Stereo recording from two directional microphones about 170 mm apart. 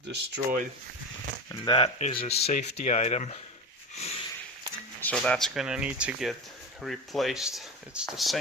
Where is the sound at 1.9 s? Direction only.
35° left (ahead or behind).